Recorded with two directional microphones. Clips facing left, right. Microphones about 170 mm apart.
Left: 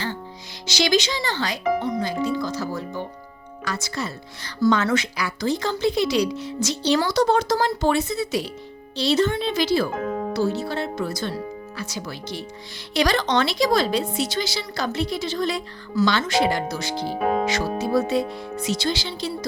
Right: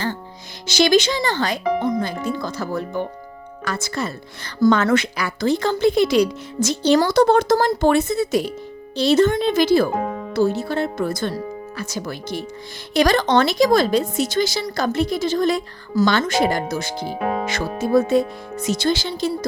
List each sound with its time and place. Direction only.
0.7 s speech: 50° right (ahead or behind)